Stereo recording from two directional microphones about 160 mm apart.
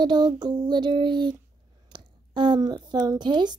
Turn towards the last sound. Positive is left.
turn(degrees=-30)  # may be behind; listen again after turning